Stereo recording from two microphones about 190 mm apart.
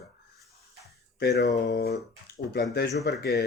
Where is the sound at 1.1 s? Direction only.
60° left (ahead or behind).